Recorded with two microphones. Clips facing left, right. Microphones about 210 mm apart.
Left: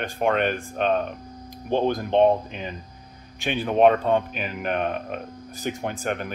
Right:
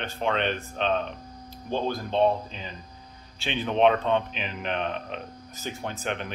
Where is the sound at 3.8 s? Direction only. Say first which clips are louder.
Left 4 dB; 45° left (ahead or behind).